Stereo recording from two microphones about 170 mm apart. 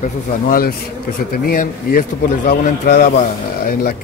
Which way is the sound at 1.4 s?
60° left (ahead or behind).